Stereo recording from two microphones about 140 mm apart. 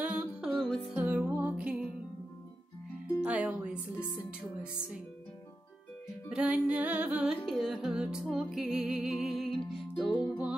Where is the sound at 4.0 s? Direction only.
15° left (ahead or behind).